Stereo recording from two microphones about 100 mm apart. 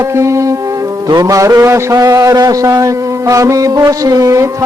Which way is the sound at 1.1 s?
35° right (ahead or behind).